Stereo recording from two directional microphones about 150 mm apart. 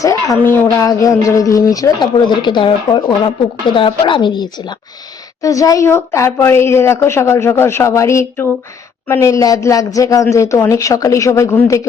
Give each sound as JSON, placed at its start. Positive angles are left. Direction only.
{"t": 0.0, "sound": "a woman's voice", "side_deg": 20}